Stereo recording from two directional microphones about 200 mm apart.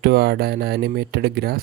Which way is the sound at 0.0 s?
50° right (ahead or behind).